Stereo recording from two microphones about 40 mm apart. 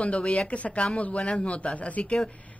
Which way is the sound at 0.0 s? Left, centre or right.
Left.